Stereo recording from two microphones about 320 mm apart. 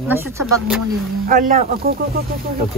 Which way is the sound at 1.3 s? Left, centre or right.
Right.